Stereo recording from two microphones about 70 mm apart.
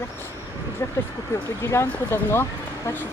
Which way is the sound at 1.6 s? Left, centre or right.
Left.